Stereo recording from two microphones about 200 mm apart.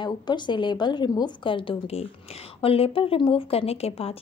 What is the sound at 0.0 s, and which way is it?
A woman's voice, 20° left (ahead or behind).